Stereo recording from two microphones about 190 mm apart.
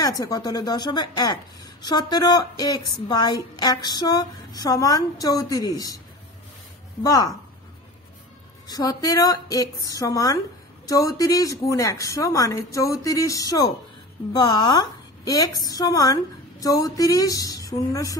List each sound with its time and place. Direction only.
0.0 s a woman's voice: 20° left (ahead or behind)
7.0 s a woman's voice: 20° left (ahead or behind)
8.6 s a woman's voice: 20° left (ahead or behind)